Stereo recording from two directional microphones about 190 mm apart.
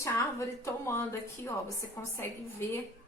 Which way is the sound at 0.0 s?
15° left (ahead or behind).